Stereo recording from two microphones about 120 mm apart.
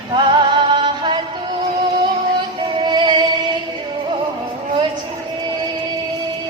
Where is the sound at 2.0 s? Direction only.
40° right (ahead or behind).